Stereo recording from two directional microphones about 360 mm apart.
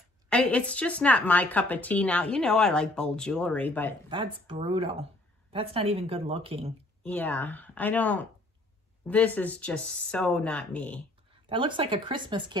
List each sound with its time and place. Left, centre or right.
0.3 s speech: centre
4.1 s speech: centre
7.0 s speech: centre
11.4 s speech: centre